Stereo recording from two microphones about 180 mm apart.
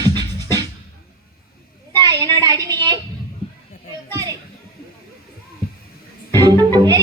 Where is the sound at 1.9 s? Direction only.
20° right (ahead or behind).